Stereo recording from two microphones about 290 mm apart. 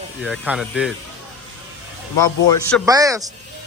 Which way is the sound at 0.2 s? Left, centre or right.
Centre.